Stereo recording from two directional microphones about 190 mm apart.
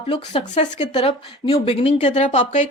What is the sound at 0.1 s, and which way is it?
Speech, 35° left (ahead or behind).